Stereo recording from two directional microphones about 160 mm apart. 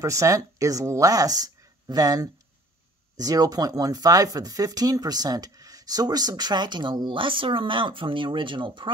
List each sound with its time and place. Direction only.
0.0 s speech: 20° right (ahead or behind)